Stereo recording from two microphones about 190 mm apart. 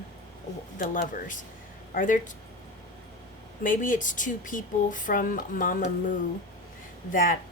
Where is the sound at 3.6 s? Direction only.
45° left (ahead or behind).